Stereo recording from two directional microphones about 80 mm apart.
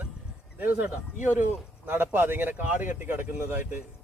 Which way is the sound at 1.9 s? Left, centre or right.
Right.